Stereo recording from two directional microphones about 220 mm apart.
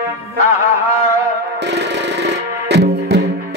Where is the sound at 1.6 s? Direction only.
50° right (ahead or behind).